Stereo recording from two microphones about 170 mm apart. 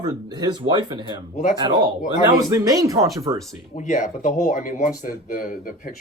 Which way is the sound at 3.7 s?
45° left (ahead or behind).